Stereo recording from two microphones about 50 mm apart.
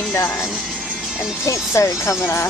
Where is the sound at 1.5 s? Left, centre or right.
Left.